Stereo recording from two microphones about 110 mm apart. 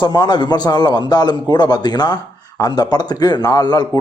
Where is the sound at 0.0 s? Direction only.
40° left (ahead or behind).